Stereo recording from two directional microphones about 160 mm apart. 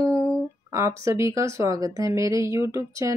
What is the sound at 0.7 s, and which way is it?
Speech, 20° right (ahead or behind).